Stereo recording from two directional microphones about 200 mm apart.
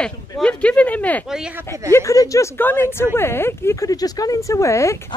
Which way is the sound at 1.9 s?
15° left (ahead or behind).